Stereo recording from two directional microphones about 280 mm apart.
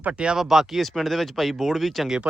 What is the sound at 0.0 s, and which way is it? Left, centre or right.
Speech, centre.